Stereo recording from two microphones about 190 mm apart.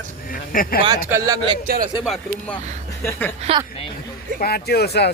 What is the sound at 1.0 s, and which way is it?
Speech, 15° right (ahead or behind).